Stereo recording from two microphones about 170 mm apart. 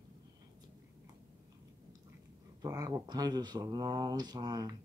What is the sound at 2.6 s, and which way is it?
Speech, 20° right (ahead or behind).